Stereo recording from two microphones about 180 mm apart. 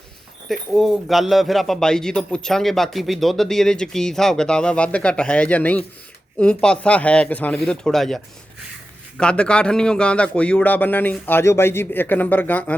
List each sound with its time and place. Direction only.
0.4 s a man's voice: centre (ahead or behind)